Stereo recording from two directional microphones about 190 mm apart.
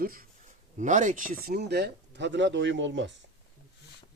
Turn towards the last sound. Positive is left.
turn(degrees=-75)  # may be behind; listen again after turning